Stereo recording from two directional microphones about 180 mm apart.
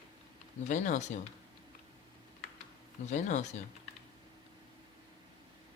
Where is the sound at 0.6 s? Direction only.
40° left (ahead or behind).